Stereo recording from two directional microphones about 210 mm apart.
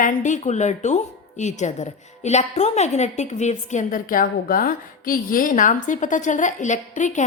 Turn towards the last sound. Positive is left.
turn(degrees=35)  # may be behind; listen again after turning